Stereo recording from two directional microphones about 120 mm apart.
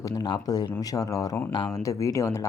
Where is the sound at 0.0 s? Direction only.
35° left (ahead or behind).